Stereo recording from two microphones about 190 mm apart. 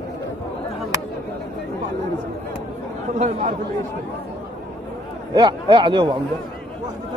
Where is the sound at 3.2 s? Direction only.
40° right (ahead or behind).